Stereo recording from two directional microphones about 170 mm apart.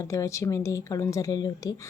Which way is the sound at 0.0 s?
20° left (ahead or behind).